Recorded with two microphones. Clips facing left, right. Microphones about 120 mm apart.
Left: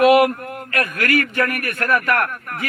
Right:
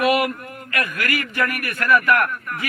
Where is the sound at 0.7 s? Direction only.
40° left (ahead or behind).